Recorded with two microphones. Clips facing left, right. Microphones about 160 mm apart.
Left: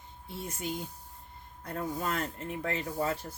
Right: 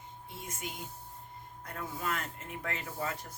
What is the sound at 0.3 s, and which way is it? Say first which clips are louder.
Speech: left 7 dB; 35° left (ahead or behind).